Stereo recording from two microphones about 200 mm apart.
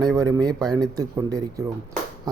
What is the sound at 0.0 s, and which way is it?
Speech, 15° right (ahead or behind).